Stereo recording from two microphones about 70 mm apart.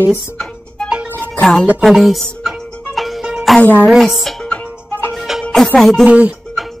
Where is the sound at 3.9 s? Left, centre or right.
Centre.